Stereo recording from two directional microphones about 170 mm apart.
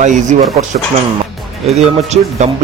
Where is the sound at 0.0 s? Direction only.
45° right (ahead or behind).